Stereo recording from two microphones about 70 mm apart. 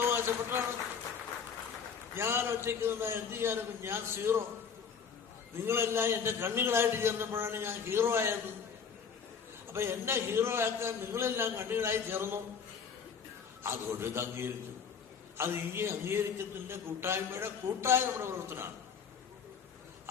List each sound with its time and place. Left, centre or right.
0.0 s a sound: right
2.1 s a man's voice: right
5.6 s a man's voice: right
9.7 s a man's voice: right
13.6 s a man's voice: right